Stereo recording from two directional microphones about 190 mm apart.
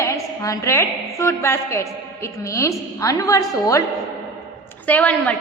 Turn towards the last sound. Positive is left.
turn(degrees=10)  # may be behind; listen again after turning